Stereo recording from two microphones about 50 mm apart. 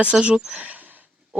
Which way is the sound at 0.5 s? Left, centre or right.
Right.